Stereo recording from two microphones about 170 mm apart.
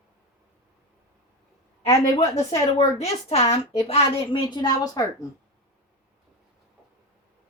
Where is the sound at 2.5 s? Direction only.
35° left (ahead or behind).